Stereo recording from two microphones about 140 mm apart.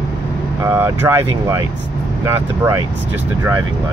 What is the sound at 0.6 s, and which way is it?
Speech, 20° right (ahead or behind).